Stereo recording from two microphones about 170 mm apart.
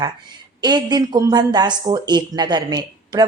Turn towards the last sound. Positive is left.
turn(degrees=-25)  # may be behind; listen again after turning